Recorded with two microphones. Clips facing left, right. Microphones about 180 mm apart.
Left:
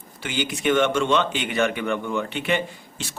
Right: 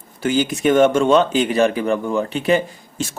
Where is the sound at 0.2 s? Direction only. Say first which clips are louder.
Right 9 dB; 45° right (ahead or behind).